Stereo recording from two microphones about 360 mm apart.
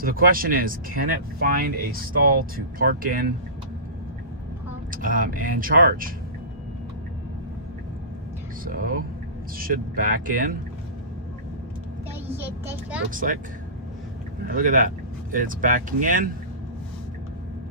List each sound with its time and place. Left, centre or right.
0.0 s speech: right
4.9 s speech: right
8.6 s speech: right
12.4 s a child's voice: centre
13.1 s speech: right
14.5 s speech: right